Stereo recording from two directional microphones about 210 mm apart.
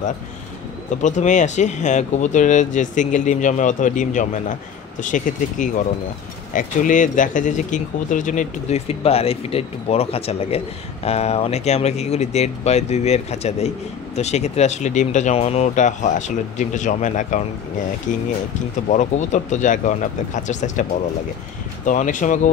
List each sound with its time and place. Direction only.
1.0 s speech: 35° left (ahead or behind)
18.9 s speech: 35° left (ahead or behind)
21.8 s speech: 40° left (ahead or behind)